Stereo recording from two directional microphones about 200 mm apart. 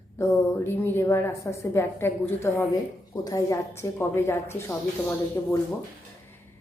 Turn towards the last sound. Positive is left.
turn(degrees=15)  # may be behind; listen again after turning